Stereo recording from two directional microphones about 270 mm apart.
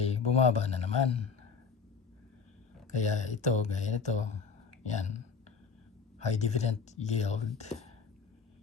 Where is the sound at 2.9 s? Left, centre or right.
Left.